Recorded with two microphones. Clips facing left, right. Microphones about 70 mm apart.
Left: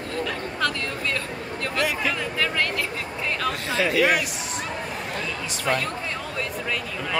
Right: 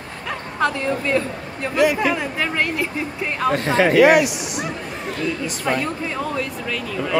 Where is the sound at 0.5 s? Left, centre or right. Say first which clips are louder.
Right 8 dB; right.